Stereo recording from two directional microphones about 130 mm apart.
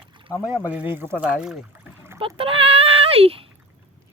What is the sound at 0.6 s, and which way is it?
Speech, 10° right (ahead or behind).